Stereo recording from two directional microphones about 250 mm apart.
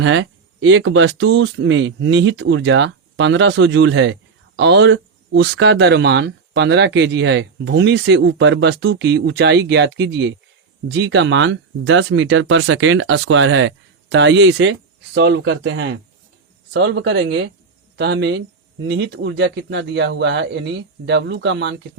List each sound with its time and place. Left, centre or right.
0.0 s speech: right